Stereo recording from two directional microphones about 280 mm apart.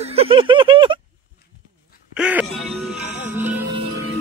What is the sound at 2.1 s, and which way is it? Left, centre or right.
Music, centre.